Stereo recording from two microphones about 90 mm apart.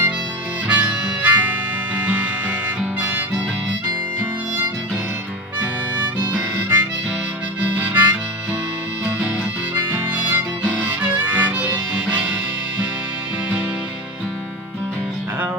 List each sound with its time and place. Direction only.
0.7 s harmonica: 15° right (ahead or behind)
3.0 s harmonica: 20° right (ahead or behind)
6.1 s harmonica: 20° right (ahead or behind)
9.0 s music: 20° right (ahead or behind)